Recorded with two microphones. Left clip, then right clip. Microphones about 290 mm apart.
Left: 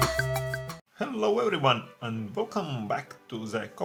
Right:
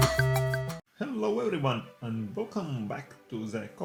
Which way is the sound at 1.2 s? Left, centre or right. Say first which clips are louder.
Left 5 dB; left.